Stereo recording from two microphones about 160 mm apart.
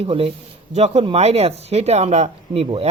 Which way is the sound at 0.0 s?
35° right (ahead or behind).